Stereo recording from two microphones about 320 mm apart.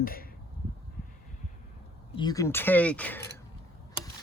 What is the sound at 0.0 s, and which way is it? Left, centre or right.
Speech, left.